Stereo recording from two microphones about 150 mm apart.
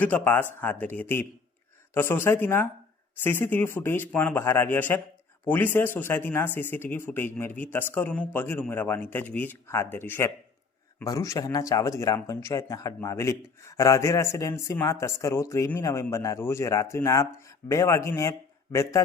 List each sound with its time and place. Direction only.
0.0 s speech: 10° left (ahead or behind)